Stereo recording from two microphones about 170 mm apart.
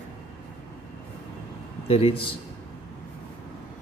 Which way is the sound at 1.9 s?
35° left (ahead or behind).